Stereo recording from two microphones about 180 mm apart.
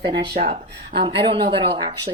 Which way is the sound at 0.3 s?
40° right (ahead or behind).